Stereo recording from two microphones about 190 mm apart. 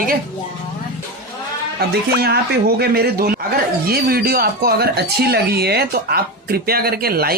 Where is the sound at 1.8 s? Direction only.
55° right (ahead or behind).